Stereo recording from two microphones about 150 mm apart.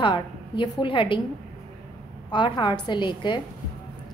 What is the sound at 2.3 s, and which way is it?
A woman's voice, 30° left (ahead or behind).